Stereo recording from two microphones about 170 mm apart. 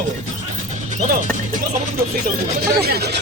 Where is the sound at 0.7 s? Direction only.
45° right (ahead or behind).